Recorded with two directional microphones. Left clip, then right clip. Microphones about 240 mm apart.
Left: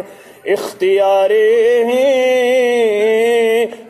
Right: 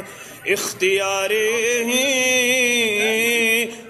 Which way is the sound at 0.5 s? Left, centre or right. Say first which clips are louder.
Left 7 dB; right.